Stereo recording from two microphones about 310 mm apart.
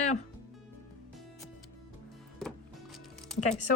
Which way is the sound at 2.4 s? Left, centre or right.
Centre.